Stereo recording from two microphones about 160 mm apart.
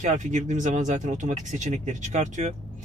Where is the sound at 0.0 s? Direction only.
50° right (ahead or behind).